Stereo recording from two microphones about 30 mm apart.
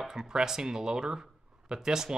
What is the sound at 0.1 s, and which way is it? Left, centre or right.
Speech, centre.